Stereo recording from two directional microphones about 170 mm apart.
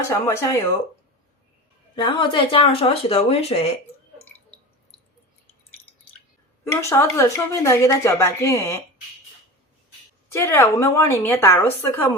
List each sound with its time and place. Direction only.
0.1 s a woman's voice: 15° left (ahead or behind)
2.0 s speech: 25° left (ahead or behind)
6.7 s a woman's voice: 15° left (ahead or behind)
10.3 s a woman's voice: 15° left (ahead or behind)